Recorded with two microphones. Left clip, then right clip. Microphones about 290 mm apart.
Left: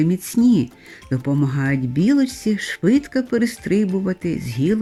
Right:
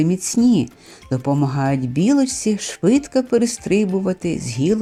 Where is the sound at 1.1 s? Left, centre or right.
Right.